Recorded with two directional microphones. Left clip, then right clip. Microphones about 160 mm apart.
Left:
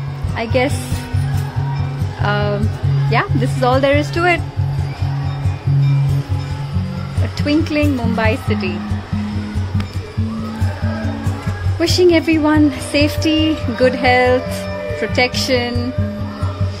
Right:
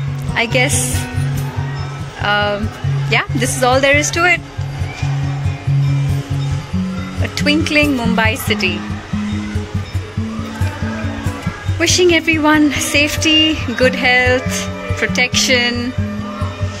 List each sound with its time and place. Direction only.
0.3 s speech: 10° left (ahead or behind)
2.2 s speech: 15° left (ahead or behind)
7.3 s speech: centre (ahead or behind)
11.8 s speech: 15° left (ahead or behind)